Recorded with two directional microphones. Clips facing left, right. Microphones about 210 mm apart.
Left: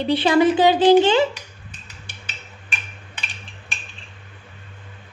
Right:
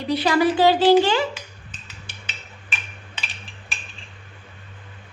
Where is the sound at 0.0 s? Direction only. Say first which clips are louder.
Left 3 dB; 25° left (ahead or behind).